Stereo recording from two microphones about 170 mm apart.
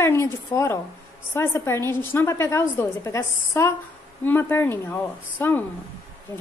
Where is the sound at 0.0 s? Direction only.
15° left (ahead or behind).